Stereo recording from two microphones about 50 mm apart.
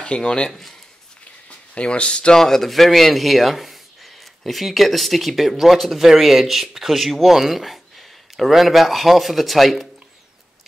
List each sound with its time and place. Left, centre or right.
0.0 s speech: left
0.5 s speech: centre
1.8 s speech: left
2.3 s speech: centre